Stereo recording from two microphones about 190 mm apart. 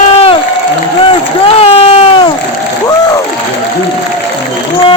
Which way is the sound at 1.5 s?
30° left (ahead or behind).